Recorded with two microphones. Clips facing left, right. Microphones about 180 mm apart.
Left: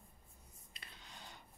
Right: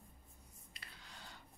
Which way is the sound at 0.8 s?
20° left (ahead or behind).